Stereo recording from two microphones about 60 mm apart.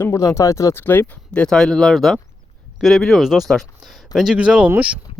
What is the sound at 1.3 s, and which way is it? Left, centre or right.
Speech, centre.